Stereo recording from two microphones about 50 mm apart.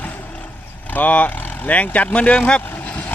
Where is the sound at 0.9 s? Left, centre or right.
Left.